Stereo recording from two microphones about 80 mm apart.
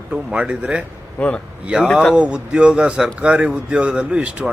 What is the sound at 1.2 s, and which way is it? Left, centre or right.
Speech, centre.